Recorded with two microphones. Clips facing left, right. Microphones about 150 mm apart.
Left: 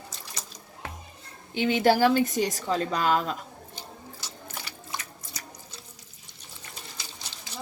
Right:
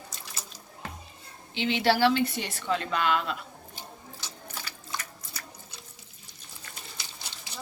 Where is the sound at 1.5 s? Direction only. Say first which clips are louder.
Left 3 dB; 45° left (ahead or behind).